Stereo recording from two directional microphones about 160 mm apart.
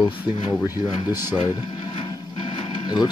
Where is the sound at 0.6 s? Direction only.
15° right (ahead or behind).